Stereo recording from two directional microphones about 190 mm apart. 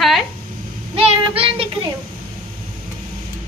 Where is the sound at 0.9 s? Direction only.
30° right (ahead or behind).